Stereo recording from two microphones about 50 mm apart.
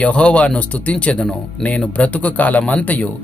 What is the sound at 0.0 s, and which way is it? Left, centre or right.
Speech, left.